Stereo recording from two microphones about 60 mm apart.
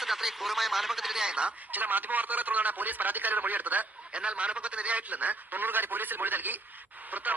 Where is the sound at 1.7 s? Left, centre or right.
Right.